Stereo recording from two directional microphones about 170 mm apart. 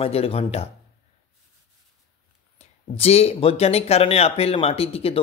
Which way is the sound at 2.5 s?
35° left (ahead or behind).